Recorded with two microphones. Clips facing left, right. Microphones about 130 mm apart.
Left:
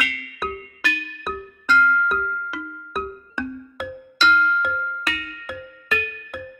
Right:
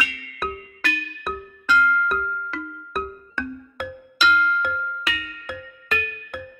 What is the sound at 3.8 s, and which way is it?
Music, centre (ahead or behind).